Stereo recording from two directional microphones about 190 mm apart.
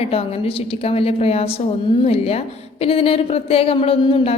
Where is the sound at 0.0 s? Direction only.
30° left (ahead or behind).